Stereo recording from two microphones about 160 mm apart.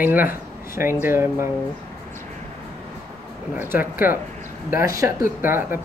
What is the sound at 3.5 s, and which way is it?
Speech, 10° right (ahead or behind).